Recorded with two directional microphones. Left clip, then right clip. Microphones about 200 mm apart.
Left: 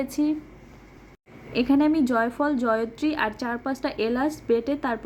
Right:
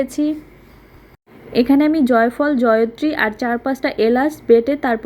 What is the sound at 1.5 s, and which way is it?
A woman's voice, 10° right (ahead or behind).